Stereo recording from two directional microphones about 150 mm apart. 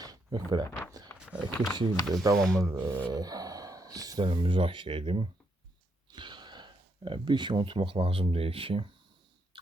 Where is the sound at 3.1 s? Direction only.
25° right (ahead or behind).